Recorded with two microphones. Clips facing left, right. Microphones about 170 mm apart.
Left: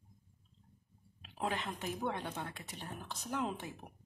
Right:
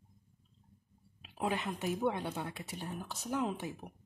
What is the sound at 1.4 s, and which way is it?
Speech, 15° right (ahead or behind).